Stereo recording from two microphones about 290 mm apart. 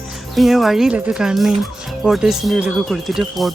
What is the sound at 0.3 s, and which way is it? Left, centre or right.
Speech, centre.